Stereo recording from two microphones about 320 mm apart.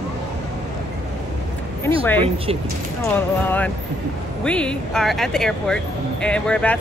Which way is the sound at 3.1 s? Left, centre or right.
Centre.